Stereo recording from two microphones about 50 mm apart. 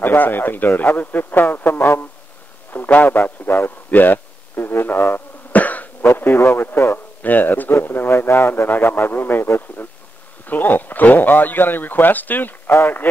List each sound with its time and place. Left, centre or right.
0.0 s a man's voice: left
6.1 s speech: left
7.2 s speech: left